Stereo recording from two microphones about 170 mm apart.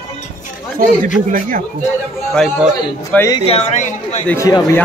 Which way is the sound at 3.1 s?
15° left (ahead or behind).